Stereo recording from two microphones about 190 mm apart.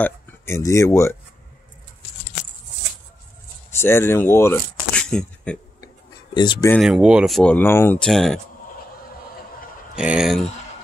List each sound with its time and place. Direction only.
0.0 s speech: 15° left (ahead or behind)
3.7 s speech: 15° left (ahead or behind)
6.3 s speech: 25° left (ahead or behind)
6.8 s speech: 5° right (ahead or behind)
9.9 s speech: 5° right (ahead or behind)